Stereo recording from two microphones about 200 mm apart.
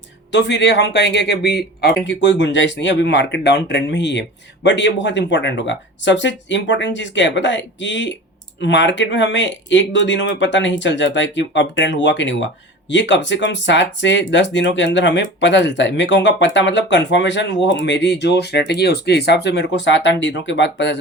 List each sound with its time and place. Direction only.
0.3 s speech: 60° left (ahead or behind)